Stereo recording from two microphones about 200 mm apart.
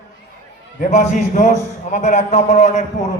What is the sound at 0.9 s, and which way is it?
A man's voice, 35° left (ahead or behind).